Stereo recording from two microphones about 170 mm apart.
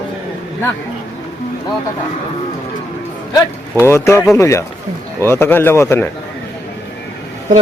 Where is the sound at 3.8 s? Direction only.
15° left (ahead or behind).